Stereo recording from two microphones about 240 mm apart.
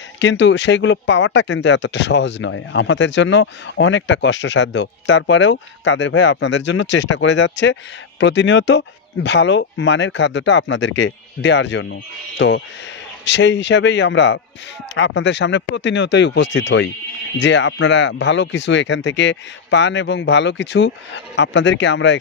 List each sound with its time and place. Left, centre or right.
0.2 s speech: left